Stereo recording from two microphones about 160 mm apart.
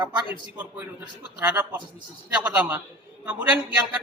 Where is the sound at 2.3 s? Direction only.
10° right (ahead or behind).